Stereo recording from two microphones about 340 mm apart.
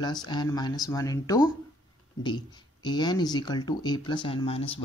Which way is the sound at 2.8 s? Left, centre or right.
Centre.